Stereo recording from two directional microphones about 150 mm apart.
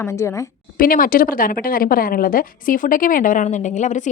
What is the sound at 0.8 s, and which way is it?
A woman's voice, 70° left (ahead or behind).